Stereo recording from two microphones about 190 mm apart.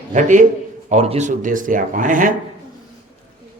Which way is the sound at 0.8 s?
35° right (ahead or behind).